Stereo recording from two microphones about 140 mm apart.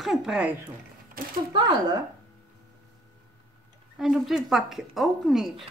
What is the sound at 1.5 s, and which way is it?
Speech, 30° right (ahead or behind).